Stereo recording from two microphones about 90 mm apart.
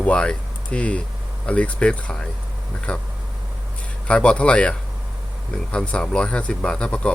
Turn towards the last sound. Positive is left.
turn(degrees=10)  # may be behind; listen again after turning